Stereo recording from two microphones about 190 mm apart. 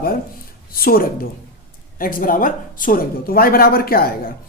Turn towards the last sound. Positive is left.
turn(degrees=50)  # may be behind; listen again after turning